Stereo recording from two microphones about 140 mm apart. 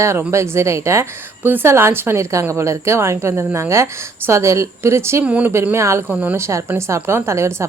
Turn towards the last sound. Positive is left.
turn(degrees=-20)  # may be behind; listen again after turning